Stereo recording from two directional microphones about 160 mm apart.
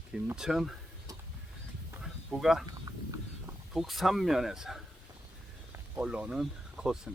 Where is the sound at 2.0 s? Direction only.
5° right (ahead or behind).